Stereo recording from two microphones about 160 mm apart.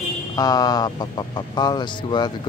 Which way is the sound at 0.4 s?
25° left (ahead or behind).